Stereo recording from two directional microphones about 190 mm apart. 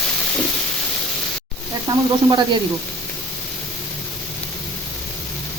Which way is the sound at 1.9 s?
20° right (ahead or behind).